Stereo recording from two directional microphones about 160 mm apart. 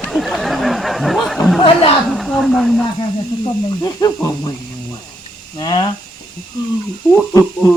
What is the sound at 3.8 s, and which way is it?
Speech, 20° left (ahead or behind).